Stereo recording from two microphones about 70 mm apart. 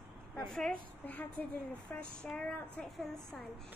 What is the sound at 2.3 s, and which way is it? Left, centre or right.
A woman's voice, centre.